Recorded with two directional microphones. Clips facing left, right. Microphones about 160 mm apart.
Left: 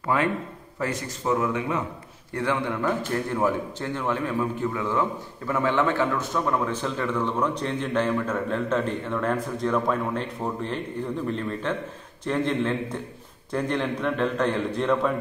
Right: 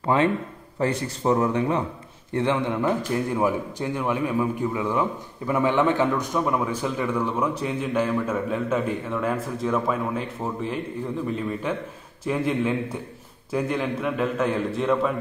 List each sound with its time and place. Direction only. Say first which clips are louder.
0.0 s a man's voice: right 3 dB; 25° right (ahead or behind)
2.3 s a man's voice: right 3 dB; 20° right (ahead or behind); by 15.1 s centre (ahead or behind)